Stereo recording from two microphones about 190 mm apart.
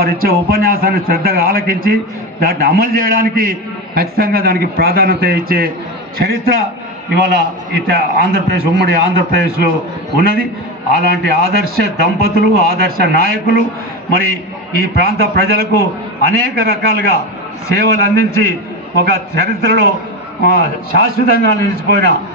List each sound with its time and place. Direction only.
0.0 s a man's voice: 50° right (ahead or behind)
14.8 s a man's voice: 55° right (ahead or behind)
21.1 s a man's voice: 50° right (ahead or behind)